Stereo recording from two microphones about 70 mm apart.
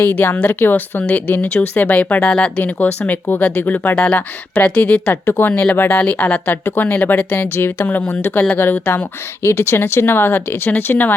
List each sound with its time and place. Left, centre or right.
0.0 s speech: left
5.2 s speech: left